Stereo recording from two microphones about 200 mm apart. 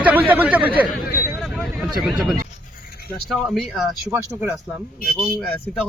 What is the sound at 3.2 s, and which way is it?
A man's voice, centre (ahead or behind).